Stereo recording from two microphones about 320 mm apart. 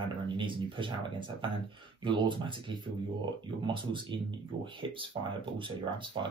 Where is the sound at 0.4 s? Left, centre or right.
Centre.